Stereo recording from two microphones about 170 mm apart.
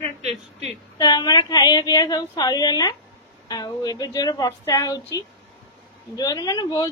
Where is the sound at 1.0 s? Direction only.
25° left (ahead or behind).